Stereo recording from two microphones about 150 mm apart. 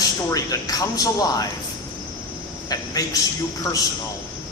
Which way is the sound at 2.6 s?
25° left (ahead or behind).